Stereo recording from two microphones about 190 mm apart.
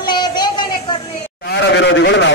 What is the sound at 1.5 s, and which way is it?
Speech, 65° left (ahead or behind).